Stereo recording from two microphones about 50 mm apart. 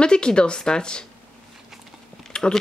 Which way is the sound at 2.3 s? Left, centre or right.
Centre.